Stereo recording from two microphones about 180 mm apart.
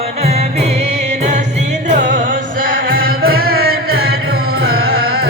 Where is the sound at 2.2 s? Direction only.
50° right (ahead or behind).